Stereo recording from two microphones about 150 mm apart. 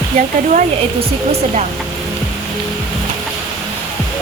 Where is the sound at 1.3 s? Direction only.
50° right (ahead or behind).